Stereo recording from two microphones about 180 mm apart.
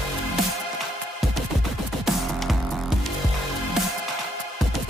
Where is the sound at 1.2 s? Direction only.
Centre (ahead or behind).